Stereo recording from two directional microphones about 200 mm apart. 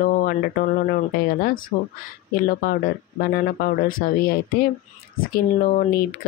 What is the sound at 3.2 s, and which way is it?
Speech, 50° left (ahead or behind).